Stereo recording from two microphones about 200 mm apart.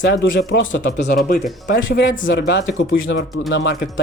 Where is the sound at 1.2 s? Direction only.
40° left (ahead or behind).